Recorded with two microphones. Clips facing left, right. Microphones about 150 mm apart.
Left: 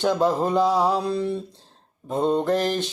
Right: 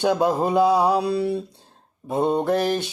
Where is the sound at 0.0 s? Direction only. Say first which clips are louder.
Right 1 dB; 15° right (ahead or behind).